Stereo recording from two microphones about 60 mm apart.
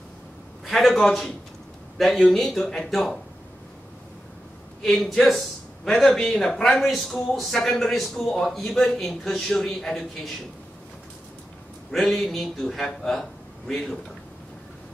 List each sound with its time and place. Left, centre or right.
0.7 s a man's voice: centre
4.8 s a man's voice: centre
11.9 s a man's voice: centre